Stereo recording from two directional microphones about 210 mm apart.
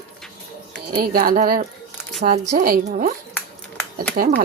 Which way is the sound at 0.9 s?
45° right (ahead or behind).